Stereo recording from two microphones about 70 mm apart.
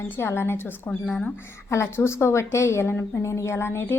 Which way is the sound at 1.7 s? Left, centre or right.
Left.